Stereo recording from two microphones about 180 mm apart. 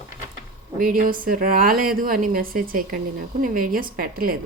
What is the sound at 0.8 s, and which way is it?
A woman's voice, 50° right (ahead or behind).